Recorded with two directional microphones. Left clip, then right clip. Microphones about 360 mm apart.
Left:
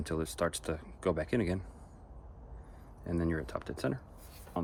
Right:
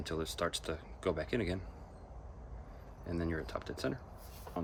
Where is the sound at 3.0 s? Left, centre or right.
Centre.